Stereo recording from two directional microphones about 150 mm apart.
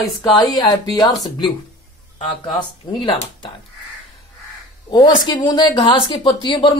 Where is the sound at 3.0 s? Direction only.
35° left (ahead or behind).